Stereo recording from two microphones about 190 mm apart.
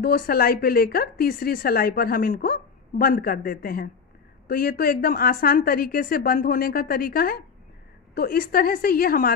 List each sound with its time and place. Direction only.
0.0 s speech: 50° left (ahead or behind)